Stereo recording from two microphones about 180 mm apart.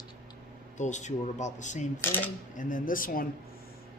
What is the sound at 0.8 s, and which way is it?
Speech, 40° left (ahead or behind).